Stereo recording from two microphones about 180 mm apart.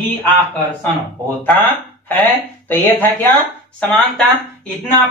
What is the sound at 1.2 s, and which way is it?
Speech, 10° left (ahead or behind).